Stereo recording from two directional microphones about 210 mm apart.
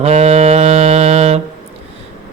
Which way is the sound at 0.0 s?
30° right (ahead or behind).